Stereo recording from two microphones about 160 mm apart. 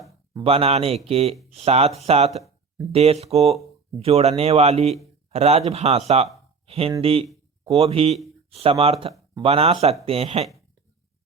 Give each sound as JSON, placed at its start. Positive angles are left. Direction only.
{"t": 0.4, "sound": "speech", "side_deg": -40}